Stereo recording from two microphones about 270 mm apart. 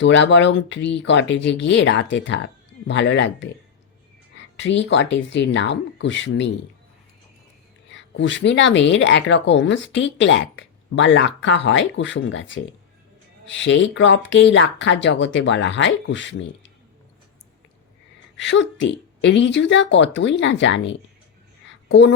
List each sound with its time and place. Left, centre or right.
0.0 s speech: left
4.5 s speech: left
7.9 s speech: left
18.3 s speech: left
21.7 s a sound: left